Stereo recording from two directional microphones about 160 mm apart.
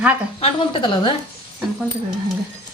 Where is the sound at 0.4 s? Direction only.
35° left (ahead or behind).